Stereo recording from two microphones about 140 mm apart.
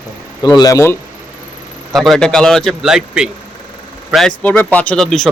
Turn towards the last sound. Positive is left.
turn(degrees=0)  # may be behind; listen again after turning